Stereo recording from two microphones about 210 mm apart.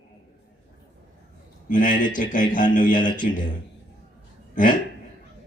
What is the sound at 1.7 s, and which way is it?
Music, 40° left (ahead or behind).